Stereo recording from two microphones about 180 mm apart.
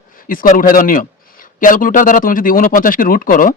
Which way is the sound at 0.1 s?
50° left (ahead or behind).